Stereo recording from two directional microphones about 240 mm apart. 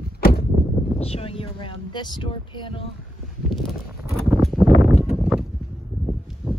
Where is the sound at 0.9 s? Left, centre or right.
Left.